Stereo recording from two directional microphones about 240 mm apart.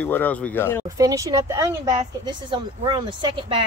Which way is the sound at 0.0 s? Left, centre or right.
Centre.